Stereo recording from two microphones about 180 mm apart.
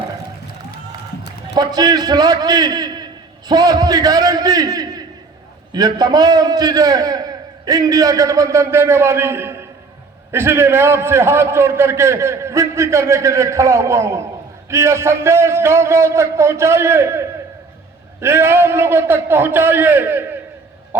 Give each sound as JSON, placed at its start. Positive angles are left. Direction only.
{"t": 1.5, "sound": "a man's voice", "side_deg": -20}